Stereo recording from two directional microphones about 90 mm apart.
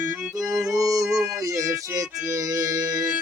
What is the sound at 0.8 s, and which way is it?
Music, 40° right (ahead or behind).